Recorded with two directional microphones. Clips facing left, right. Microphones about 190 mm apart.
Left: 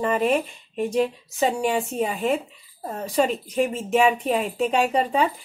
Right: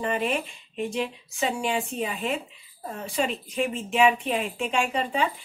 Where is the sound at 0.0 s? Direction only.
45° left (ahead or behind).